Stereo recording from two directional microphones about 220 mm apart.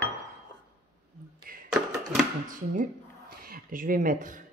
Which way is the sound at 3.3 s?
40° right (ahead or behind).